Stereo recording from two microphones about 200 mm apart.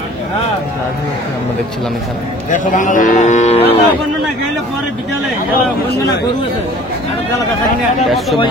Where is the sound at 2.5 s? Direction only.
40° left (ahead or behind).